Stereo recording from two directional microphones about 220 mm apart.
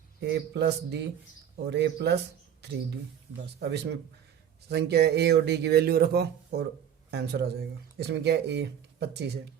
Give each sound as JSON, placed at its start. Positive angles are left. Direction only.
{"t": 0.5, "sound": "speech", "side_deg": -50}
{"t": 3.6, "sound": "speech", "side_deg": -50}